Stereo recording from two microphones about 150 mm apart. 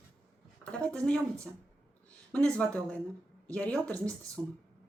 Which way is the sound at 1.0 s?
5° left (ahead or behind).